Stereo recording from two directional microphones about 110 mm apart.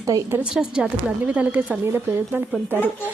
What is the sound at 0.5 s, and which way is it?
A woman's voice, 10° right (ahead or behind).